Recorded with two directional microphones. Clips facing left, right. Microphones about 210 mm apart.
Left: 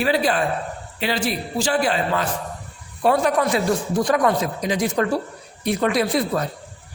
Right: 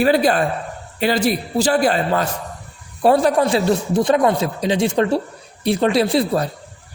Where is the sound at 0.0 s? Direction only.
40° right (ahead or behind).